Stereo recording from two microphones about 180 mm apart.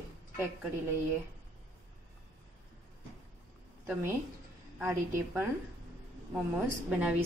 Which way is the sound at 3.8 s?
10° right (ahead or behind).